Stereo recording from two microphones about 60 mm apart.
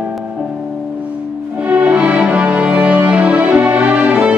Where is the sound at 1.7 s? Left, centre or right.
Right.